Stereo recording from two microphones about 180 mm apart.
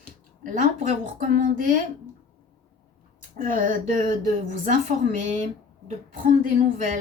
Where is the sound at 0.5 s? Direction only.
45° right (ahead or behind).